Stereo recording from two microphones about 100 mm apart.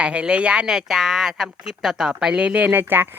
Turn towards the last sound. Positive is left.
turn(degrees=-20)  # may be behind; listen again after turning